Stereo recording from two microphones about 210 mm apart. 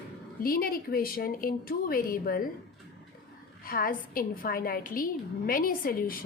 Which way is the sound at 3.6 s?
45° left (ahead or behind).